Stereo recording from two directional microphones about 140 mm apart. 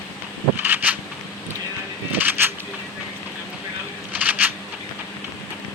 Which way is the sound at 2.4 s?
15° right (ahead or behind).